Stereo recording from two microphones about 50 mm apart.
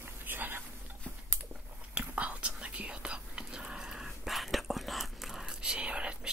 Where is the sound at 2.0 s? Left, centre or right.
Right.